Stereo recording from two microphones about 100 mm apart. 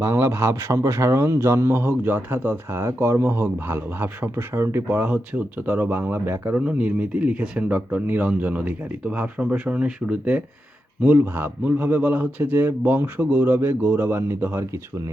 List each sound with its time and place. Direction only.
0.0 s speech: 25° right (ahead or behind)